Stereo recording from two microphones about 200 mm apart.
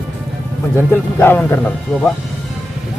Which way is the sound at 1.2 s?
10° left (ahead or behind).